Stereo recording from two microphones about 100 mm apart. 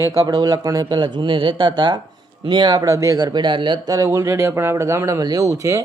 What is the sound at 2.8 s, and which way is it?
Speech, 35° right (ahead or behind).